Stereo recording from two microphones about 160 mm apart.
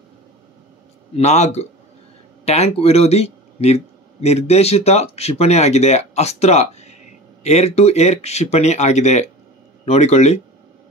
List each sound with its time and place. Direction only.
1.1 s speech: 45° left (ahead or behind)